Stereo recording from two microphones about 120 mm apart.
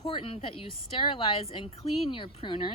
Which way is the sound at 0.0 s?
45° left (ahead or behind).